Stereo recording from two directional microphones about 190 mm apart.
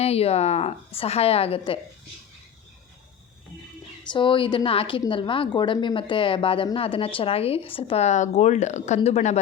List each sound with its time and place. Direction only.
0.0 s a woman's voice: 30° left (ahead or behind)
4.1 s a woman's voice: 25° left (ahead or behind)